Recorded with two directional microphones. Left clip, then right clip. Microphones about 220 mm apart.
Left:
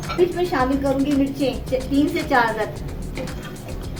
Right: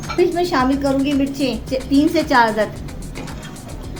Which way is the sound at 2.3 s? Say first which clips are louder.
Right 3 dB; 45° right (ahead or behind).